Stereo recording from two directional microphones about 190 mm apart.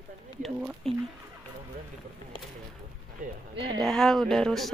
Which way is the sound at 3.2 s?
45° right (ahead or behind).